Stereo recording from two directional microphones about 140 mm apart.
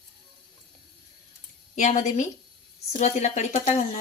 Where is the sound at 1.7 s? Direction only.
60° left (ahead or behind).